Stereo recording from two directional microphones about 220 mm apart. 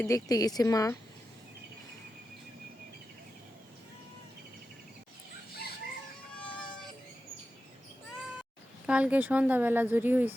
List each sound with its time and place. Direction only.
0.0 s speech: 15° left (ahead or behind)
8.9 s a woman's voice: 5° right (ahead or behind)